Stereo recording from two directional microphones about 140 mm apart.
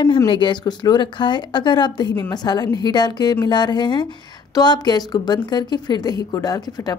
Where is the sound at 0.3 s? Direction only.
35° left (ahead or behind).